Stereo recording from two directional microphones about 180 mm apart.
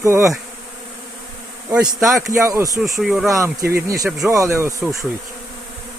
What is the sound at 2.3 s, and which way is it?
Speech, 15° right (ahead or behind).